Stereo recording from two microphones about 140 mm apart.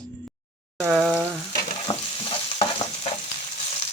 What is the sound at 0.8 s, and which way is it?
Frying, 5° right (ahead or behind).